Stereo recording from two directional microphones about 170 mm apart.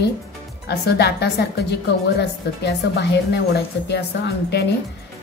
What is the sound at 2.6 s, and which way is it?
A woman's voice, 85° left.